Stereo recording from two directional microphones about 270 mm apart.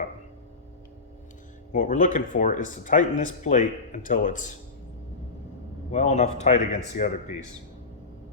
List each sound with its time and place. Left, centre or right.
1.7 s speech: left
5.9 s speech: left